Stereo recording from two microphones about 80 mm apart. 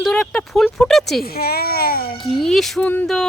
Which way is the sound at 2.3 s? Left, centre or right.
Centre.